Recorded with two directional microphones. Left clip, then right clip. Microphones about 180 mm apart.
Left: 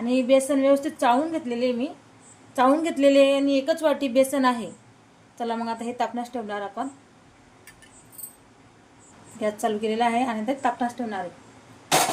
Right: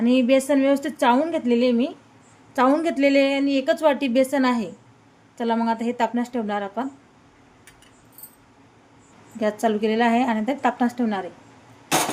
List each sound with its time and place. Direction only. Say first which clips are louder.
0.0 s a woman's voice: right 1 dB; 45° right (ahead or behind)
2.6 s a woman's voice: right 1 dB; 30° right (ahead or behind)
9.4 s a woman's voice: right 3 dB; 35° right (ahead or behind); by 11.2 s 55° right (ahead or behind)